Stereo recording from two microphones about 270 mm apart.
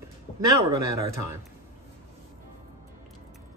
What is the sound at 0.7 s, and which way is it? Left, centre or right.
Speech, centre.